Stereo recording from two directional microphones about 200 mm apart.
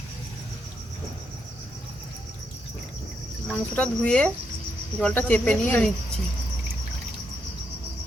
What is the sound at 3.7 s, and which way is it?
Cricket, 5° left (ahead or behind).